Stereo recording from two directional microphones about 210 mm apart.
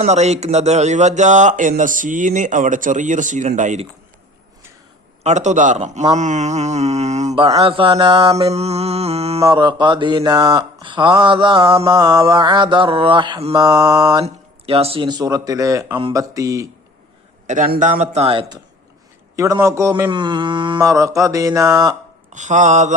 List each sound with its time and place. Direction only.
0.0 s speech: 30° right (ahead or behind)
5.2 s speech: 35° right (ahead or behind)
6.1 s mantra: 35° right (ahead or behind); by 8.5 s 15° right (ahead or behind)
8.5 s mantra: 30° right (ahead or behind)
9.4 s mantra: 20° right (ahead or behind)
17.4 s speech: 35° right (ahead or behind); by 21.9 s 15° right (ahead or behind)
22.3 s speech: 35° right (ahead or behind)